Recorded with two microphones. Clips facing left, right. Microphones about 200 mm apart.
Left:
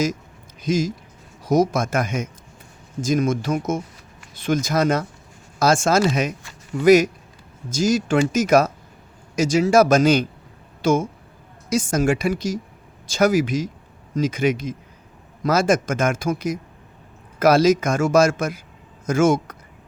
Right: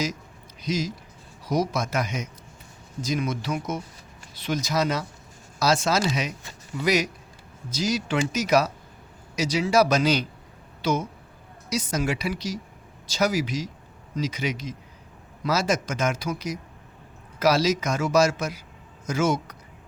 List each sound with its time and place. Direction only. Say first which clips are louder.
0.6 s a man's voice: left 6 dB; 50° left (ahead or behind)